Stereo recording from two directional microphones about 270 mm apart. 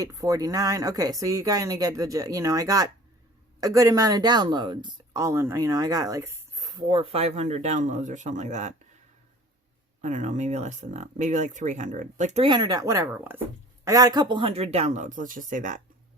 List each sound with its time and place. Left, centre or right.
0.0 s speech: centre
10.0 s speech: right